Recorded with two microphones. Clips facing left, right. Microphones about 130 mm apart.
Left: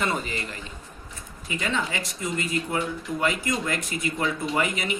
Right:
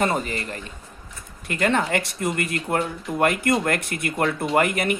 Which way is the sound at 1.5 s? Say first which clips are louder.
Right 7 dB; 60° right (ahead or behind).